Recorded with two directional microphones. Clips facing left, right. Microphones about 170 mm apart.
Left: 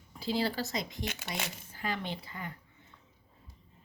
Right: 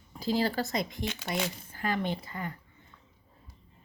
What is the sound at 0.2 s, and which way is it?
Speech, 45° right (ahead or behind).